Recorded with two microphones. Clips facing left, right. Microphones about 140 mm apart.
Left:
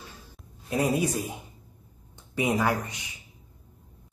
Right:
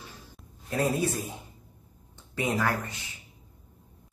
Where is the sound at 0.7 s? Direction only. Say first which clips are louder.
Left 2 dB; 15° left (ahead or behind).